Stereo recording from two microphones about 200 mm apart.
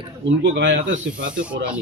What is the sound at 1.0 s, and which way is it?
Speech, 5° right (ahead or behind).